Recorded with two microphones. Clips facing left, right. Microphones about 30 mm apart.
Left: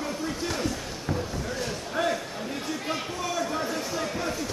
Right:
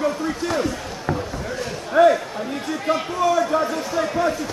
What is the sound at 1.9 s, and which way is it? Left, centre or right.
Speech, right.